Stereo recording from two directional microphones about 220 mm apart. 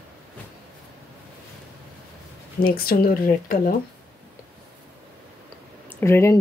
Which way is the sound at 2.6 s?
40° left (ahead or behind).